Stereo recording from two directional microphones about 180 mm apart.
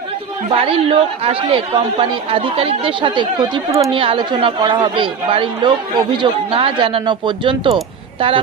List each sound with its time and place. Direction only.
0.5 s a man's voice: 30° right (ahead or behind)